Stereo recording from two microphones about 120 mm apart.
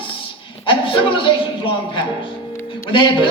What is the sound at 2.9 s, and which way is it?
Speech, 45° left (ahead or behind).